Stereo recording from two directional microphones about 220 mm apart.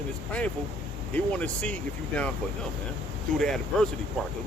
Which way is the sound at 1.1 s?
5° left (ahead or behind).